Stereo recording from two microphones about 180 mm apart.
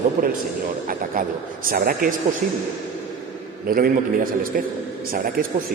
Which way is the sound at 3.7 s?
55° right (ahead or behind).